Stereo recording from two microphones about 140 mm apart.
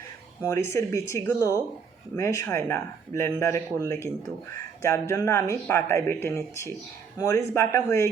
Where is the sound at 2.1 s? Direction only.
20° left (ahead or behind).